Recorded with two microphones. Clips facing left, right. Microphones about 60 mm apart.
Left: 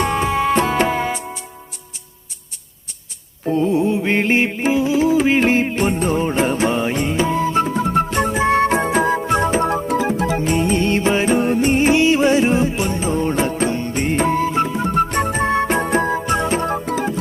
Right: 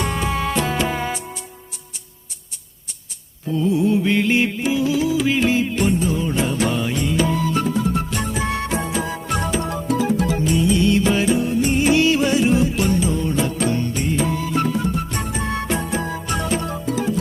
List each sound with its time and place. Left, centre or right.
0.0 s music: left
3.4 s music: left
10.4 s music: left
11.3 s music: left
14.6 s music: left
14.8 s music: left
16.6 s music: left